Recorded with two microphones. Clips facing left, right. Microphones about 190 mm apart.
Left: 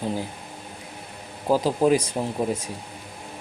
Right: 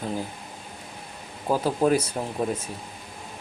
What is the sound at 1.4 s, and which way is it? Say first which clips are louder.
Speech: left 2 dB; 10° left (ahead or behind).